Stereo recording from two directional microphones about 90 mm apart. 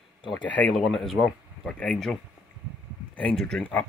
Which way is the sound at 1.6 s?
10° left (ahead or behind).